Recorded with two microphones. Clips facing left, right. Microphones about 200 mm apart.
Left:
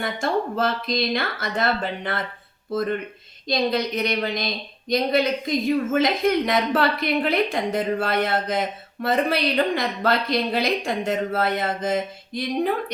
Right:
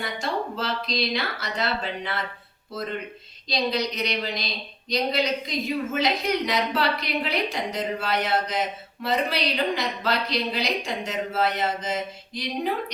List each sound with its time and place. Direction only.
0.0 s a woman's voice: 50° left (ahead or behind)
3.4 s a woman's voice: 55° left (ahead or behind)